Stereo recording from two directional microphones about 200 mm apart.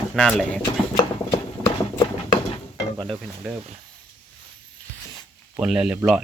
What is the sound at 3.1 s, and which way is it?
Speech, 5° right (ahead or behind).